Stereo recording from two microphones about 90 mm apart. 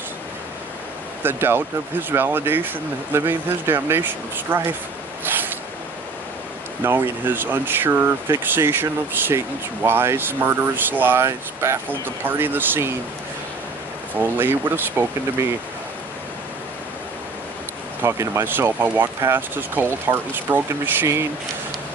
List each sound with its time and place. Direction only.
1.2 s speech: 25° right (ahead or behind)
5.2 s a sound: 20° right (ahead or behind)
6.8 s speech: 25° right (ahead or behind)
9.8 s speech: 25° right (ahead or behind)
14.2 s speech: 25° right (ahead or behind)
18.0 s speech: 35° right (ahead or behind)